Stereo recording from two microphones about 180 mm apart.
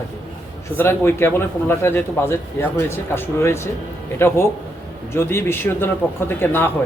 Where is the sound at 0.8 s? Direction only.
10° left (ahead or behind).